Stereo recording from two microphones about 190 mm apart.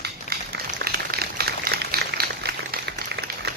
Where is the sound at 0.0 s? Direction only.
55° right (ahead or behind).